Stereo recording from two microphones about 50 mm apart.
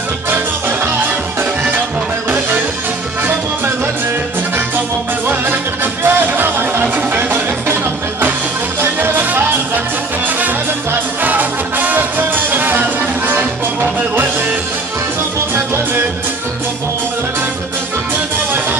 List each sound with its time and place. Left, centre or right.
5.3 s music: right
8.8 s music: right
11.2 s music: right
15.5 s music: right